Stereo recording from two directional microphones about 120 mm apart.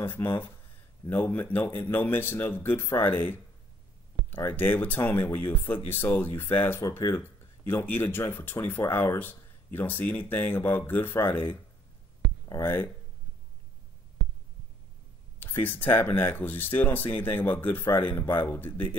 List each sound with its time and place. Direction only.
0.0 s speech: 15° left (ahead or behind)
12.4 s speech: 20° left (ahead or behind)
15.3 s speech: 15° left (ahead or behind)